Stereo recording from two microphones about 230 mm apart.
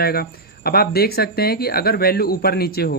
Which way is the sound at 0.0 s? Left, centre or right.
Left.